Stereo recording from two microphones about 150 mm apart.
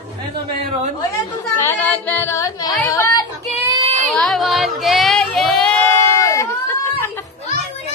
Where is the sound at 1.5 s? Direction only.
15° left (ahead or behind).